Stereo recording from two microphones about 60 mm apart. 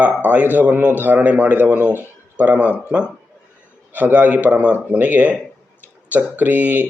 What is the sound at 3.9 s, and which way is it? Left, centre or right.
A man's voice, right.